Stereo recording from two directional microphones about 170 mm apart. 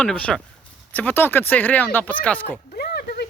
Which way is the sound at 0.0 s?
5° left (ahead or behind).